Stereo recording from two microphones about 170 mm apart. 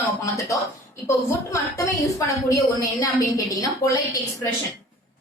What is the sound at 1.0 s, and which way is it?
A woman's voice, 20° left (ahead or behind).